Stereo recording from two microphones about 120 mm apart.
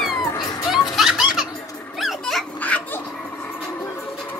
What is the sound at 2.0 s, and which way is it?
Dog, centre (ahead or behind).